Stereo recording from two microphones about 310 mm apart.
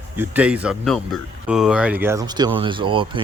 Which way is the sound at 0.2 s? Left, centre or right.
Centre.